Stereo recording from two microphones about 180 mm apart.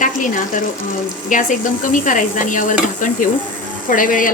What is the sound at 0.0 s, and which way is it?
Speech, 45° left (ahead or behind).